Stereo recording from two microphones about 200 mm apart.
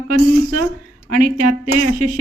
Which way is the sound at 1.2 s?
40° right (ahead or behind).